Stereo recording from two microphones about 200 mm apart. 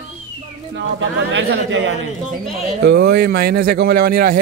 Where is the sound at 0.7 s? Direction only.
65° right (ahead or behind).